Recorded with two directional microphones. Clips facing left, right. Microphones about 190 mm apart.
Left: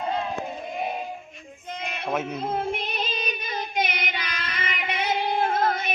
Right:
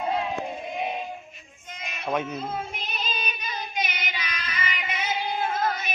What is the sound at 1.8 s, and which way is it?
Bleat, 60° left (ahead or behind).